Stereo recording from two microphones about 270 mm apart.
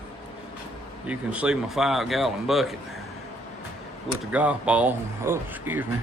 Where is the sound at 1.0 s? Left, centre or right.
Centre.